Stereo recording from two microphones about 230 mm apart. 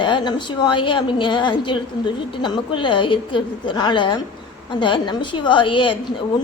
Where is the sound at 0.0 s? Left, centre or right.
Centre.